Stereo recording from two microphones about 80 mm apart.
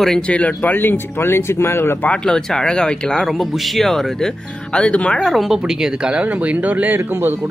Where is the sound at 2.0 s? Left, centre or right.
Centre.